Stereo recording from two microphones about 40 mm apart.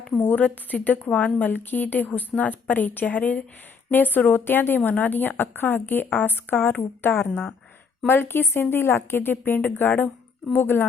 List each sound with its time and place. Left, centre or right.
0.2 s a woman's voice: left
2.0 s a woman's voice: left
3.9 s a woman's voice: left
8.7 s a woman's voice: left